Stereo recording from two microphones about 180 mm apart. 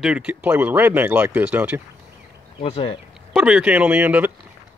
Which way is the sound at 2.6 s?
35° left (ahead or behind).